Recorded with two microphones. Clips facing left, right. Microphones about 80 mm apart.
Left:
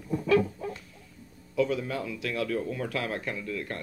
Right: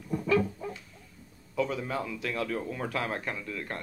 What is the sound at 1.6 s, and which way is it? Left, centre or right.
Speech, right.